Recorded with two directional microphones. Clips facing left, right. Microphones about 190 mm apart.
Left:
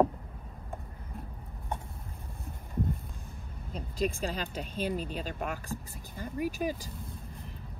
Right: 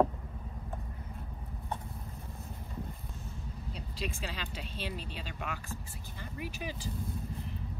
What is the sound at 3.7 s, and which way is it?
Speech, 50° left (ahead or behind).